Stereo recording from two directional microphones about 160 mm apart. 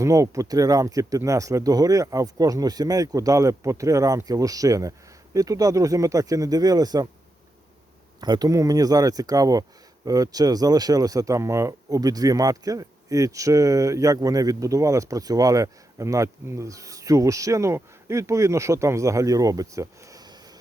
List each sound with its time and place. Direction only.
0.0 s speech: 20° right (ahead or behind)
8.2 s speech: 25° right (ahead or behind)